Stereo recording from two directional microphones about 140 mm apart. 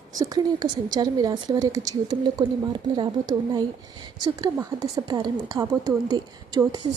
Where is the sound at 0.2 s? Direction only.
30° right (ahead or behind).